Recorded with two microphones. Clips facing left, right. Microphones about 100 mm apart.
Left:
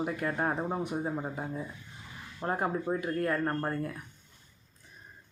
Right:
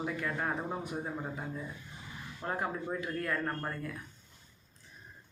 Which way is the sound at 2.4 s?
30° left (ahead or behind).